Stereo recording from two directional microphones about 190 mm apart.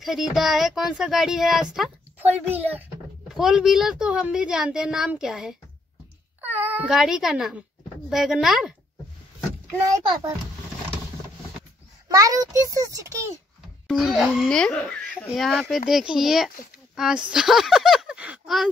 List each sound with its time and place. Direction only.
0.0 s speech: centre (ahead or behind)
12.1 s a child's voice: 20° right (ahead or behind)
13.8 s speech: centre (ahead or behind)